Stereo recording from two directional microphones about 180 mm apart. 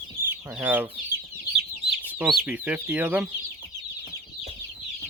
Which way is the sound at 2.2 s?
5° right (ahead or behind).